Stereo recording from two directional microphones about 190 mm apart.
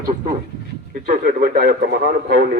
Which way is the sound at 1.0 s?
45° right (ahead or behind).